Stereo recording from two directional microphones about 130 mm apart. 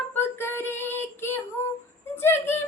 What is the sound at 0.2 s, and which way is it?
Child singing, 20° left (ahead or behind).